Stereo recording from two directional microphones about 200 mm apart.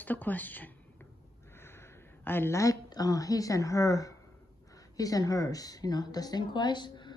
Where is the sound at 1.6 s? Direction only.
10° left (ahead or behind).